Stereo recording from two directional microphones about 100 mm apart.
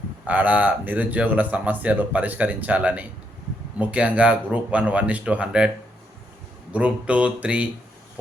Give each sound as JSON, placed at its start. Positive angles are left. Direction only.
{"t": 0.3, "sound": "speech", "side_deg": -15}
{"t": 6.7, "sound": "speech", "side_deg": -10}